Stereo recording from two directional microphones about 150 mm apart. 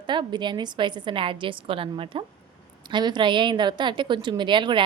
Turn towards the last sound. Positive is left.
turn(degrees=-30)  # may be behind; listen again after turning